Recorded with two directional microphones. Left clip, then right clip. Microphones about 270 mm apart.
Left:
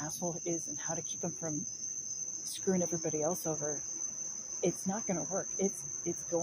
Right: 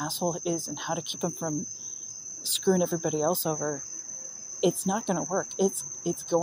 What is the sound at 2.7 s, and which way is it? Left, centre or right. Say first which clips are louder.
Speech: right 7 dB; right.